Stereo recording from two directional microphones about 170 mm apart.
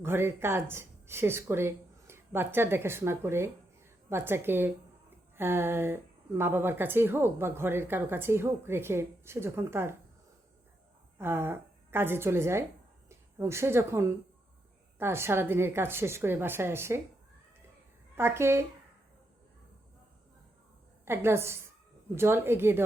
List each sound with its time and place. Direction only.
0.0 s speech: 15° right (ahead or behind)
11.2 s a woman's voice: 15° right (ahead or behind)
18.2 s speech: 15° right (ahead or behind)
21.0 s speech: 15° right (ahead or behind)